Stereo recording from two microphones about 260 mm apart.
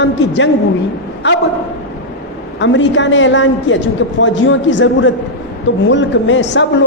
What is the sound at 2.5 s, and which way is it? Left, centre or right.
A woman's voice, left.